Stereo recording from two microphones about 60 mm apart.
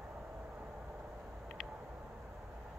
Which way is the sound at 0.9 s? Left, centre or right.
Right.